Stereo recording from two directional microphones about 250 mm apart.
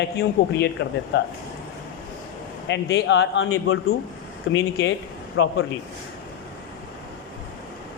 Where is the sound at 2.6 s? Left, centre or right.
Left.